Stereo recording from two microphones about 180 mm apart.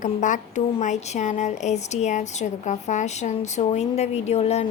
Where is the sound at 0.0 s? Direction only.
45° left (ahead or behind).